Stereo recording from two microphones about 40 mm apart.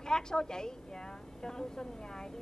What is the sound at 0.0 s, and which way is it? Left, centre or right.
A woman's voice, centre.